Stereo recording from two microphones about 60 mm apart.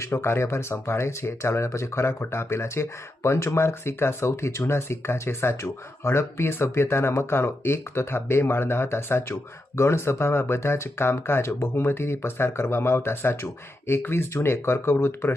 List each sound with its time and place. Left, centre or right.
0.0 s speech: left